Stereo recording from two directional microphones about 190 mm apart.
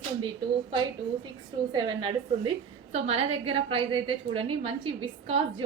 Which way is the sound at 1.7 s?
20° right (ahead or behind).